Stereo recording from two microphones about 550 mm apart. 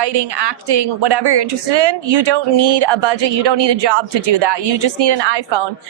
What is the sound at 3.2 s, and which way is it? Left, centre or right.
Speech, right.